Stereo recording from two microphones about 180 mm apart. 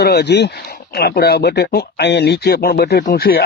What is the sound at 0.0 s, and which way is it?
Speech, 65° left (ahead or behind).